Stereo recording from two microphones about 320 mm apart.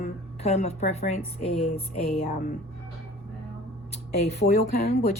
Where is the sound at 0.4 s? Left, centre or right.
Centre.